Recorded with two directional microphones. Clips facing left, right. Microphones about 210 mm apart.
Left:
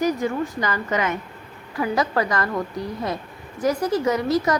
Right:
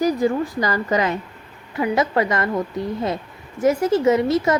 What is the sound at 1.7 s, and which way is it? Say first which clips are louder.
Speech: right 3 dB; 25° right (ahead or behind).